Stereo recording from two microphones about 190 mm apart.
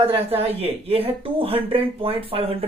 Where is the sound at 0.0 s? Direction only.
30° right (ahead or behind).